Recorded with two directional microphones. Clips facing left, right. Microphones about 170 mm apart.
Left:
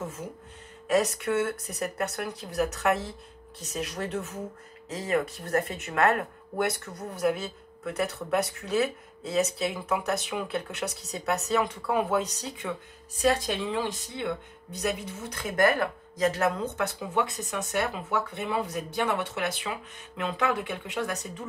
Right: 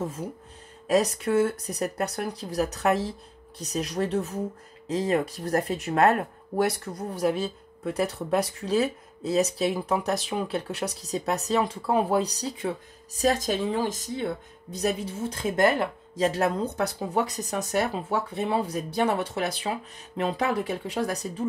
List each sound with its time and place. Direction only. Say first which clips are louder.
0.8 s speech: right 2 dB; 35° right (ahead or behind)